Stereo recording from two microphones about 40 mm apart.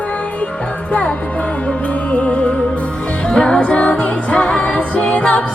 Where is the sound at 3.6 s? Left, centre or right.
Left.